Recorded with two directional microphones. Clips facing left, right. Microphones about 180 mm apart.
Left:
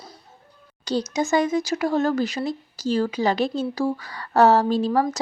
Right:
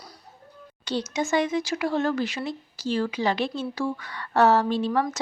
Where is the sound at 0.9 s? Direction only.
40° left (ahead or behind).